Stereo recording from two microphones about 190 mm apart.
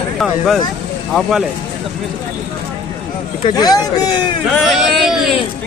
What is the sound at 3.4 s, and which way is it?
Speech, 20° left (ahead or behind).